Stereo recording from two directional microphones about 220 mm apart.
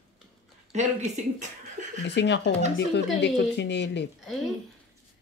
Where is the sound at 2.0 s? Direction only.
50° left (ahead or behind).